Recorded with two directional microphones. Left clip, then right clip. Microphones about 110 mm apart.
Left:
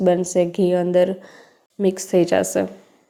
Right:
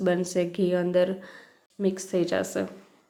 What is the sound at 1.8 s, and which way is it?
Speech, 55° left (ahead or behind).